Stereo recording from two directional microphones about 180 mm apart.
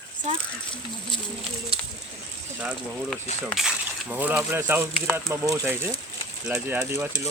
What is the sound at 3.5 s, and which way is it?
Speech, centre (ahead or behind).